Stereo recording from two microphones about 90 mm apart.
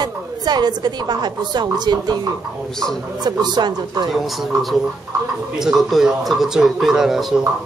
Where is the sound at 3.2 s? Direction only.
55° right (ahead or behind).